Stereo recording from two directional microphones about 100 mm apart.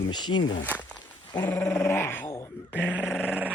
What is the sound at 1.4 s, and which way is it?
Dog, 20° left (ahead or behind).